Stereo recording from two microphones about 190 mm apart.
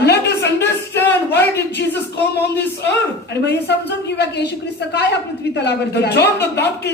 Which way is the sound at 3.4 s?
60° left (ahead or behind).